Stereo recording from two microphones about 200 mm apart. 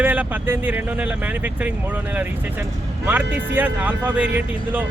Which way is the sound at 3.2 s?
65° right (ahead or behind).